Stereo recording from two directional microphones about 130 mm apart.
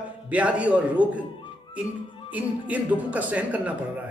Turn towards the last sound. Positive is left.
turn(degrees=-10)  # may be behind; listen again after turning